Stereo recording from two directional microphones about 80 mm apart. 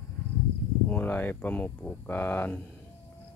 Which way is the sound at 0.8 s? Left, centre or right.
Centre.